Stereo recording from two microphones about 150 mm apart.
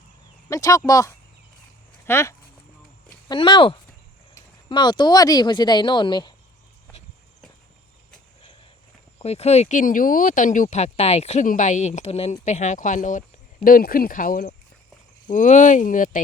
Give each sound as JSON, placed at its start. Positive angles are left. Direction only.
{"t": 0.5, "sound": "speech", "side_deg": 25}
{"t": 3.2, "sound": "speech", "side_deg": 30}
{"t": 9.1, "sound": "speech", "side_deg": 45}
{"t": 13.7, "sound": "speech", "side_deg": 70}